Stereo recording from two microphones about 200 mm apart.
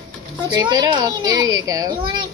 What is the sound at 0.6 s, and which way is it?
A child's voice, 20° right (ahead or behind).